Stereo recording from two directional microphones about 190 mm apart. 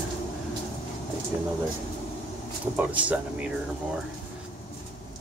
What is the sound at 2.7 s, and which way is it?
Speech, 5° right (ahead or behind).